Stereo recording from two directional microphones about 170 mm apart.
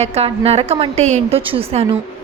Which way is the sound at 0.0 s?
35° right (ahead or behind).